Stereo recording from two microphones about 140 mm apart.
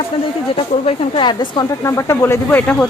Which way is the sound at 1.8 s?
20° left (ahead or behind).